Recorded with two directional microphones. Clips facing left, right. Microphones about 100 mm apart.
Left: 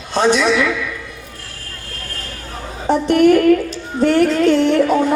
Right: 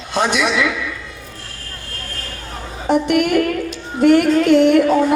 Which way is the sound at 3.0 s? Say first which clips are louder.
Left 5 dB; 35° left (ahead or behind).